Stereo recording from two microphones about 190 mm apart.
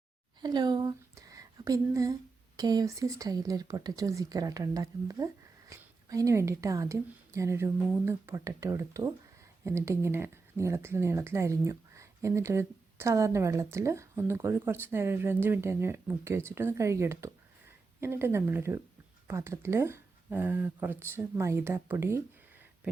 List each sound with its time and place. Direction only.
0.4 s speech: 20° right (ahead or behind)